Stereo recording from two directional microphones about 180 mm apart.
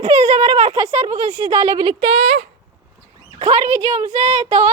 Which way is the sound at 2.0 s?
35° right (ahead or behind).